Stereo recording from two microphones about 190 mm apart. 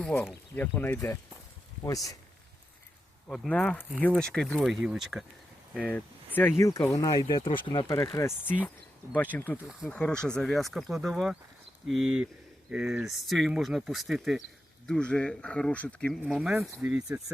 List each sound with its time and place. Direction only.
0.0 s speech: 5° left (ahead or behind)
3.2 s speech: 5° left (ahead or behind)
5.9 s a sound: 10° left (ahead or behind)
6.6 s speech: 15° left (ahead or behind); by 11.3 s centre (ahead or behind)
12.7 s speech: 5° right (ahead or behind)
16.2 s speech: 5° right (ahead or behind)